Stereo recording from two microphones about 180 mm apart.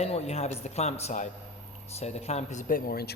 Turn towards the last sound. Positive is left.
turn(degrees=55)  # may be behind; listen again after turning